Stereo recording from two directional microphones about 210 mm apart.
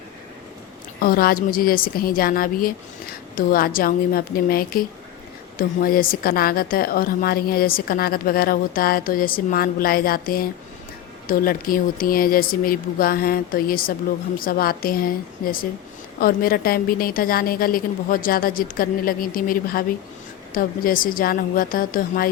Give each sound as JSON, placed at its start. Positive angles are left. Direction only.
{"t": 1.0, "sound": "a woman's voice", "side_deg": 45}
{"t": 16.2, "sound": "a woman's voice", "side_deg": 45}